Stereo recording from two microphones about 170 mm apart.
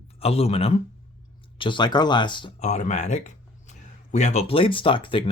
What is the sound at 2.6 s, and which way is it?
Speech, 45° left (ahead or behind).